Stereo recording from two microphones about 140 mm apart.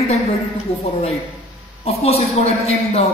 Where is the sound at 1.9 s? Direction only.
45° left (ahead or behind).